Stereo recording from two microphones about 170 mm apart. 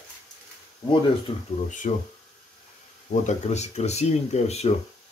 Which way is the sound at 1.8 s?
45° left (ahead or behind).